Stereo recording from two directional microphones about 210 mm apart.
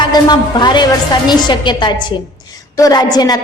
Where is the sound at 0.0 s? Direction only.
20° left (ahead or behind).